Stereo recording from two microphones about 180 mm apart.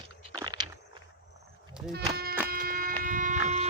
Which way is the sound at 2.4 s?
55° right (ahead or behind).